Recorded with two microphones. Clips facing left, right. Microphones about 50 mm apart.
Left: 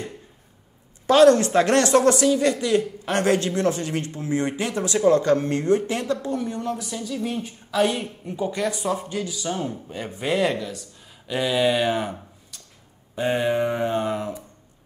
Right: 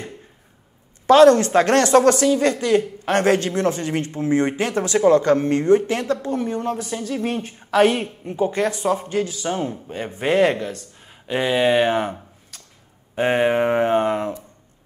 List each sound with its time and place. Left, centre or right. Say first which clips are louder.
1.0 s a woman's voice: right 3 dB; right
11.2 s speech: right 3 dB; right
13.1 s speech: right 4 dB; right